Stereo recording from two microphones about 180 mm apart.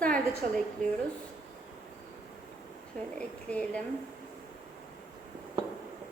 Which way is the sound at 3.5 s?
5° left (ahead or behind).